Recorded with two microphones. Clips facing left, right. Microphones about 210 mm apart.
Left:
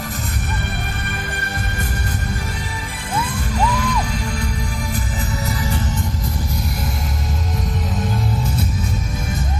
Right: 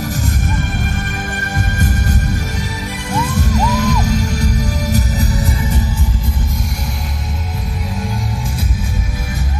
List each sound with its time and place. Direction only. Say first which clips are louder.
3.3 s music: right 5 dB; 40° right (ahead or behind)